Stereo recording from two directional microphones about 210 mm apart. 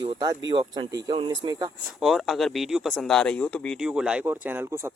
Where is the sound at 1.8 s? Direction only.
Centre (ahead or behind).